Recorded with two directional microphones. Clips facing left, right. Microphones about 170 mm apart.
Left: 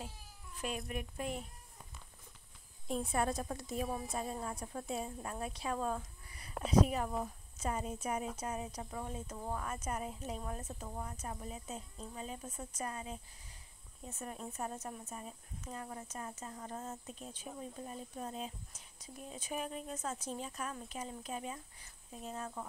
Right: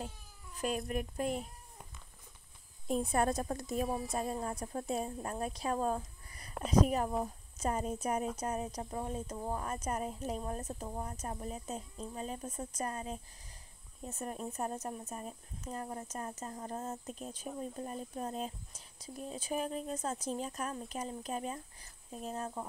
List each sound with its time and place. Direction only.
0.8 s speech: 40° right (ahead or behind)
3.1 s a woman's voice: 45° right (ahead or behind)